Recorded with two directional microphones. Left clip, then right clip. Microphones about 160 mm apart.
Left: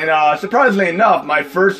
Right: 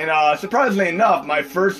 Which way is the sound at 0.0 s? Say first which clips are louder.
Left 3 dB; 25° left (ahead or behind).